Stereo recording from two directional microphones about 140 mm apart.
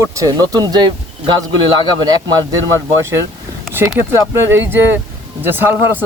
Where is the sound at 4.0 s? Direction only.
15° right (ahead or behind).